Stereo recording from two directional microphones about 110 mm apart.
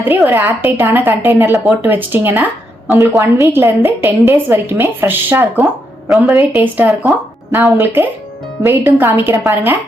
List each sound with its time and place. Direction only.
0.3 s a woman's voice: 20° right (ahead or behind)
6.1 s a woman's voice: centre (ahead or behind)
6.5 s a woman's voice: 15° right (ahead or behind)